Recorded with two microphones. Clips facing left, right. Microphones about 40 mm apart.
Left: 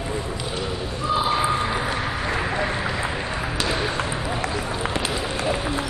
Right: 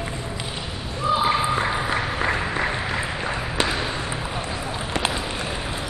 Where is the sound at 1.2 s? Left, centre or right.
Right.